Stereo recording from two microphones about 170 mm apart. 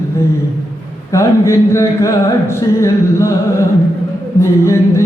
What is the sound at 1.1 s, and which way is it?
Music, 15° left (ahead or behind).